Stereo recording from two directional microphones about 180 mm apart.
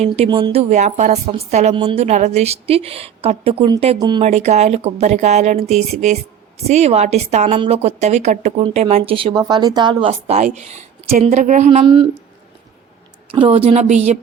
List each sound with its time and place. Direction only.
0.1 s a woman's voice: 25° right (ahead or behind)
13.3 s a woman's voice: 30° right (ahead or behind)